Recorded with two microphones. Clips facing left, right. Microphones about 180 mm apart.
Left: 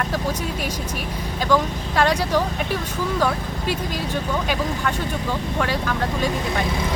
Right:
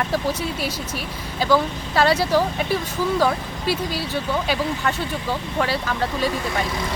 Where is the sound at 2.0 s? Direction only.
10° right (ahead or behind).